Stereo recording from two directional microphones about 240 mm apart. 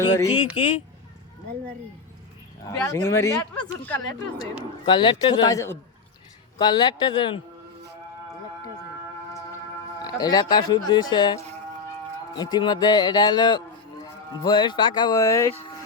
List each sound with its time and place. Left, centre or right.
0.0 s speech: centre
2.6 s speech: centre
4.9 s a man's voice: centre
10.0 s speech: centre